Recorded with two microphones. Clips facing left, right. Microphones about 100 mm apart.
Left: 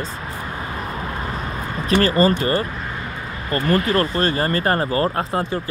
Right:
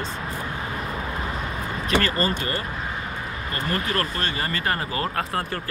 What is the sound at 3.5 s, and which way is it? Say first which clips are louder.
Speech: left 9 dB; 40° left (ahead or behind).